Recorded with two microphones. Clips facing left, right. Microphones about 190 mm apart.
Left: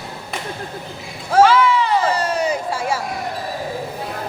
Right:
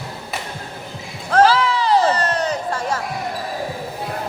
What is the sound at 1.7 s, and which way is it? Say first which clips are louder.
Crowd: even; 35° right (ahead or behind).